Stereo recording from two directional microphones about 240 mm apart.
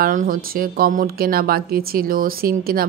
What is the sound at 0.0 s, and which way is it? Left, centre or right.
A woman's voice, right.